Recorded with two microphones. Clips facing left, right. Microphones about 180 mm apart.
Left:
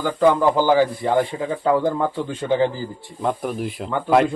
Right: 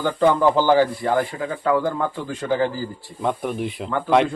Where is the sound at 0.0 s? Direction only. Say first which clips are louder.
Left 1 dB; 10° left (ahead or behind).